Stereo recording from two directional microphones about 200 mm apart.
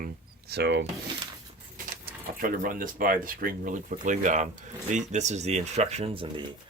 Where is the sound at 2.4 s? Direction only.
45° right (ahead or behind); by 6.4 s 25° right (ahead or behind).